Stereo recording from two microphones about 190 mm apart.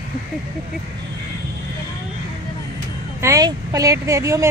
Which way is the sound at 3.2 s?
15° right (ahead or behind).